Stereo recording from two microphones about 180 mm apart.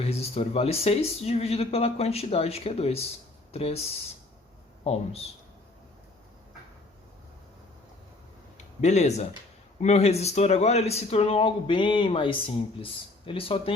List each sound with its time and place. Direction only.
0.0 s speech: 35° left (ahead or behind)
8.5 s speech: 40° left (ahead or behind)